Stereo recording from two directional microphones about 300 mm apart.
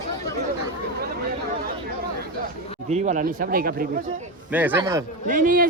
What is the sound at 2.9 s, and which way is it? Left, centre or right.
Speech, right.